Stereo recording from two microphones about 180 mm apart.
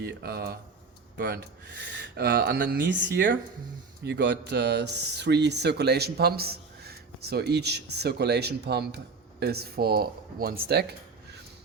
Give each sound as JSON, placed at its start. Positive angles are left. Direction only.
{"t": 0.0, "sound": "speech", "side_deg": -60}
{"t": 1.1, "sound": "speech", "side_deg": -70}